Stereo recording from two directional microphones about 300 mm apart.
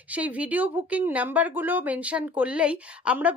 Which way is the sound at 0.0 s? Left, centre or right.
Centre.